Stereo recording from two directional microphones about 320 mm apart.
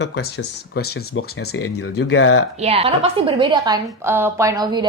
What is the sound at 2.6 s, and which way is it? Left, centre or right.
A woman's voice, centre.